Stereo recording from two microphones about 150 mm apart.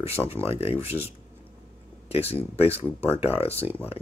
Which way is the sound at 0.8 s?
40° left (ahead or behind).